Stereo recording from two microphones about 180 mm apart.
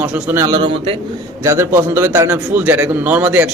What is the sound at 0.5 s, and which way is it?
Speech, 30° right (ahead or behind).